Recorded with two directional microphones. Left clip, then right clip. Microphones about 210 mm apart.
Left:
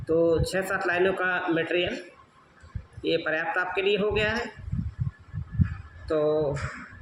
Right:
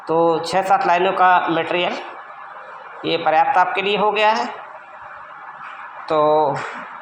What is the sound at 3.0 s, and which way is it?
A man's voice, 10° left (ahead or behind).